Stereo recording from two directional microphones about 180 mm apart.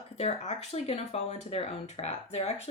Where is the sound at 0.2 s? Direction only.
35° left (ahead or behind).